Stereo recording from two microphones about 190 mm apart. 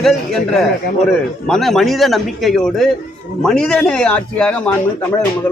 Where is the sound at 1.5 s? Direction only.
Centre (ahead or behind).